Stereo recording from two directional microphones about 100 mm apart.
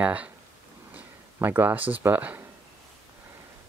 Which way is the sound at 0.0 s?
15° right (ahead or behind).